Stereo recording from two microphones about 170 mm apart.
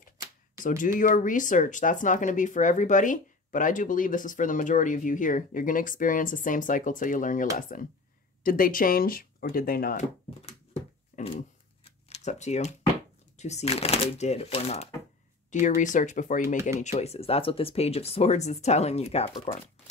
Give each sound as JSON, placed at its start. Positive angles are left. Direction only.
{"t": 0.6, "sound": "speech", "side_deg": 50}
{"t": 10.4, "sound": "dog", "side_deg": 40}
{"t": 12.1, "sound": "a sound", "side_deg": 40}
{"t": 13.4, "sound": "speech", "side_deg": 40}